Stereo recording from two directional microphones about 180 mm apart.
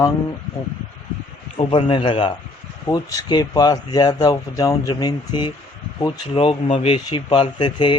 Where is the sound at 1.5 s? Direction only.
30° left (ahead or behind).